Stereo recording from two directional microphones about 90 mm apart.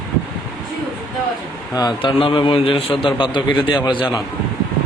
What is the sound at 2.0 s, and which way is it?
A man's voice, 75° left (ahead or behind).